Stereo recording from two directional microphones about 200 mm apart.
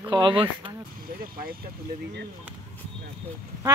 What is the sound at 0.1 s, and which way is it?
Speech, 25° right (ahead or behind).